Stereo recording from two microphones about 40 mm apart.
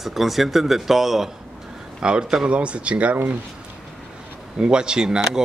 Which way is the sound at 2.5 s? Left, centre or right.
Right.